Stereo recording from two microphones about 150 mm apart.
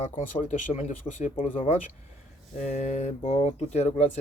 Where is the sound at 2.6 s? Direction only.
50° left (ahead or behind).